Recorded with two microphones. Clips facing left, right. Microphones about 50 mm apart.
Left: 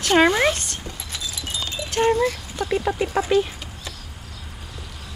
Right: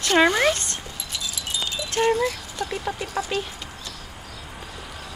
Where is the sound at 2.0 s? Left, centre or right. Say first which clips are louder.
Left 2 dB; centre.